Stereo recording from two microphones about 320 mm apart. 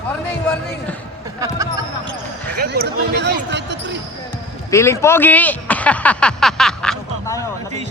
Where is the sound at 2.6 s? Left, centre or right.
Right.